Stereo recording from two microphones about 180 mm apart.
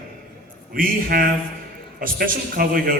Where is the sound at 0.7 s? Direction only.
50° right (ahead or behind).